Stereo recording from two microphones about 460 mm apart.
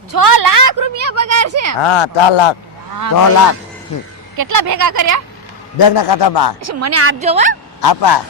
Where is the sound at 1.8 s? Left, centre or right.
Left.